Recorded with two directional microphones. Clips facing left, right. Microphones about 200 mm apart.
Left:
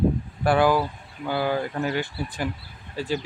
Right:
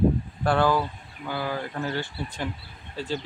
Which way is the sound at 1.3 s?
30° left (ahead or behind).